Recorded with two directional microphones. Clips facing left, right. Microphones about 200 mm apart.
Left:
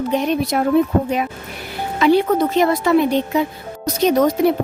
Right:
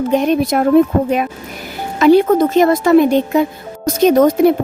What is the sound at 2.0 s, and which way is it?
A woman's voice, 45° right (ahead or behind).